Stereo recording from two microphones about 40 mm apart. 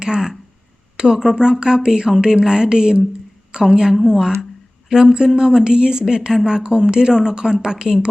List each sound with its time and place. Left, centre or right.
0.0 s speech: centre